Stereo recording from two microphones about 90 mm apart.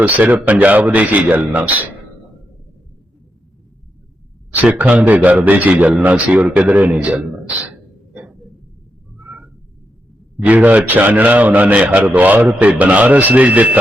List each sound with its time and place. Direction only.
0.0 s a man's voice: 20° right (ahead or behind)
4.6 s a man's voice: 15° right (ahead or behind)
9.2 s a sound: 20° right (ahead or behind)
10.4 s a man's voice: 15° right (ahead or behind)